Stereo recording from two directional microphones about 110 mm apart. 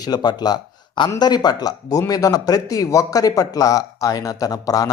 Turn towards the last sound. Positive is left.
turn(degrees=35)  # may be behind; listen again after turning